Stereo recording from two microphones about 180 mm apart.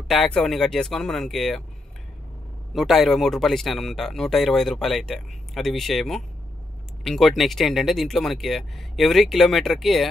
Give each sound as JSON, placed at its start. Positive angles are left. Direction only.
{"t": 0.1, "sound": "speech", "side_deg": 0}
{"t": 2.7, "sound": "speech", "side_deg": 0}